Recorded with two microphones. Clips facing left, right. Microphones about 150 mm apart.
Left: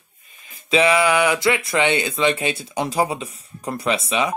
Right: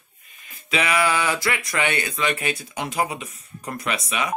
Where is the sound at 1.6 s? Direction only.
25° left (ahead or behind).